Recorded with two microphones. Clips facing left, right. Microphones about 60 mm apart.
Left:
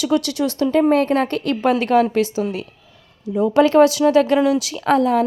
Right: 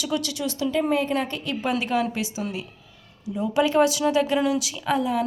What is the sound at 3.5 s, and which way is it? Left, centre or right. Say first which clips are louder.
Speech: left 7 dB; left.